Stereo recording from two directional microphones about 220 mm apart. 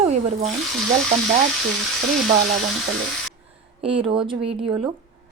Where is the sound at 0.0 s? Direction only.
30° right (ahead or behind).